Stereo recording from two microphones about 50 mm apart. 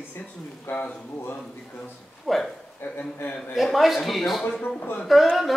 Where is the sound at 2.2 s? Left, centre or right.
Centre.